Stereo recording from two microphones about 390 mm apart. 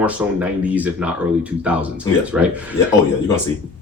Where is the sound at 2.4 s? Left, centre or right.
Centre.